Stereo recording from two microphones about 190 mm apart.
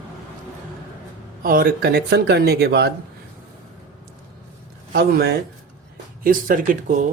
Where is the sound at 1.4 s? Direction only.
50° right (ahead or behind).